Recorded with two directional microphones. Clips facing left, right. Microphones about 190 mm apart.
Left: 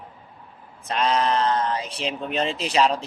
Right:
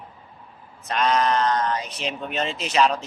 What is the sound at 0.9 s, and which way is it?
Speech, 30° left (ahead or behind).